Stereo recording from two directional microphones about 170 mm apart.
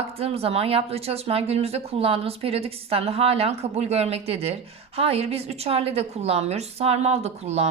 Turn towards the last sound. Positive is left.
turn(degrees=-40)  # may be behind; listen again after turning